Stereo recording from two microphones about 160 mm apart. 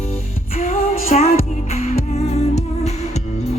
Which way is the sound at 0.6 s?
40° left (ahead or behind).